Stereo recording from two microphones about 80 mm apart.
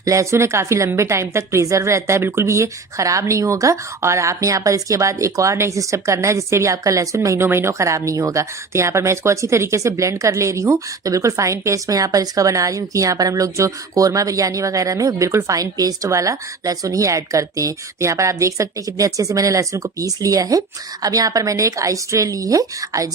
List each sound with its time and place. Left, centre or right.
0.0 s speech: right